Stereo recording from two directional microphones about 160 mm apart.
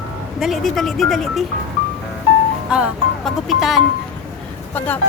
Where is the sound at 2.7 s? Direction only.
5° right (ahead or behind).